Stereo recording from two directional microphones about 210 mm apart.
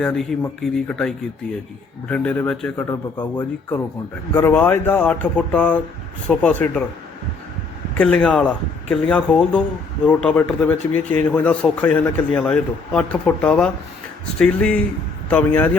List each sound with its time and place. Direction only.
0.0 s a man's voice: 5° left (ahead or behind)
2.9 s a man's voice: 20° left (ahead or behind)
7.9 s a man's voice: 5° left (ahead or behind)